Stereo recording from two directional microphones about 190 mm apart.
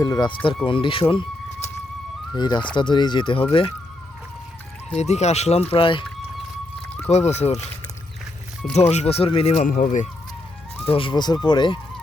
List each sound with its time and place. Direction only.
0.0 s speech: 20° left (ahead or behind)
2.3 s speech: 20° left (ahead or behind)
4.9 s speech: 35° left (ahead or behind)
7.1 s speech: 35° left (ahead or behind)
8.7 s speech: 35° left (ahead or behind)
10.8 s speech: 30° left (ahead or behind)